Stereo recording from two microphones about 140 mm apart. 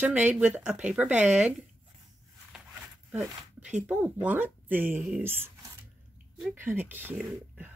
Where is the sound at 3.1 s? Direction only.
5° right (ahead or behind).